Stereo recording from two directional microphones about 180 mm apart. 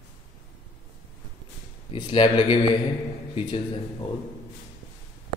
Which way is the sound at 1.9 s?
30° left (ahead or behind).